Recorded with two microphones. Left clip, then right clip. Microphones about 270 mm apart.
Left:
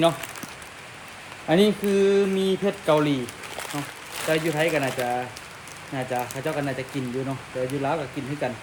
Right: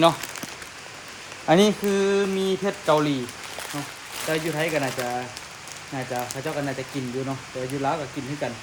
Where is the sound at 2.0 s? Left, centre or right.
Centre.